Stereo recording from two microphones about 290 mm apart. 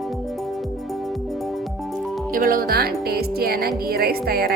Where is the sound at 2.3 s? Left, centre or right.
Right.